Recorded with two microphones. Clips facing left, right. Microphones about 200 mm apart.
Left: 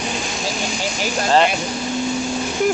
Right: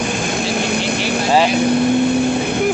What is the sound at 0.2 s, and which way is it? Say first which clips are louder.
Vehicle: right 6 dB; 60° right (ahead or behind).